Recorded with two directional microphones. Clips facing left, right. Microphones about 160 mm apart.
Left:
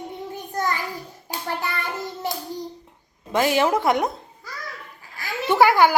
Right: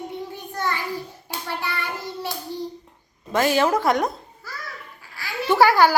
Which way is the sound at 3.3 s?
20° left (ahead or behind).